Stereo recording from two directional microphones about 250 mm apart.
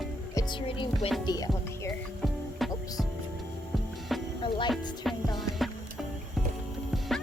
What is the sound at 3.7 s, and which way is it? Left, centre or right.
Music, centre.